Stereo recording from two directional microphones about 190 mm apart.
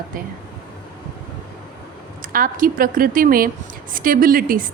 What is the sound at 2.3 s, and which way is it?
A woman's voice, 45° right (ahead or behind).